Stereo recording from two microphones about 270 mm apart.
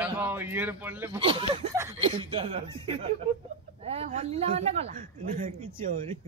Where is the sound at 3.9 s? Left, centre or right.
Right.